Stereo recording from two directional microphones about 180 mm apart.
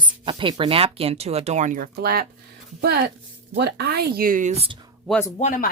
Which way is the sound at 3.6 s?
65° right (ahead or behind).